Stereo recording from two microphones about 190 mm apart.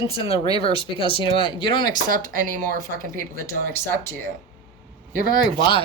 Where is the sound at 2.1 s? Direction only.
45° right (ahead or behind).